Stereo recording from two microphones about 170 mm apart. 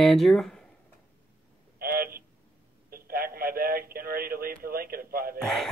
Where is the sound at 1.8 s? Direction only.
60° right (ahead or behind).